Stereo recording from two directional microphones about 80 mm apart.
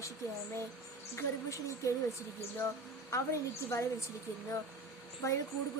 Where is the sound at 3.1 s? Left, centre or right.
Left.